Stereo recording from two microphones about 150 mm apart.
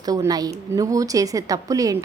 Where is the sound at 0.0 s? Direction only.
25° right (ahead or behind).